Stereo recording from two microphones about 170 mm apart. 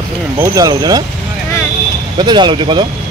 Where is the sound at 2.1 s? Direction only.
25° right (ahead or behind).